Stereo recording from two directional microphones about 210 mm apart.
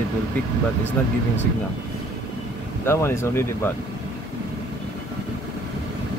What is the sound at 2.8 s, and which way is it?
Speech, 10° left (ahead or behind).